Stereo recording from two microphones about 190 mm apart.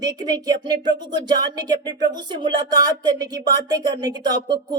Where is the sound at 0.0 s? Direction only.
20° right (ahead or behind).